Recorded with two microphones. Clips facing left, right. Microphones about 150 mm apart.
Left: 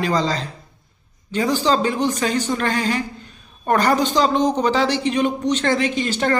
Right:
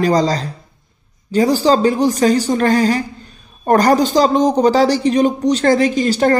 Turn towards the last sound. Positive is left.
turn(degrees=-40)  # may be behind; listen again after turning